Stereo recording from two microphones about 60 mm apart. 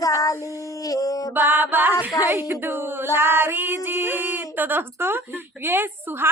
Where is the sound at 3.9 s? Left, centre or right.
Right.